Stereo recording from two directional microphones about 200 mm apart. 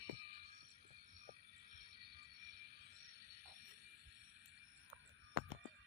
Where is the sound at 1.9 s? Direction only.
55° right (ahead or behind).